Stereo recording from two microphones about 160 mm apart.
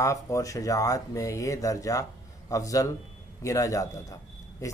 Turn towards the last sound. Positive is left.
turn(degrees=20)  # may be behind; listen again after turning